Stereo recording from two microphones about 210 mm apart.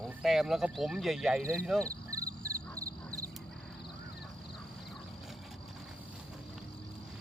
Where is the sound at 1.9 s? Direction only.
15° right (ahead or behind).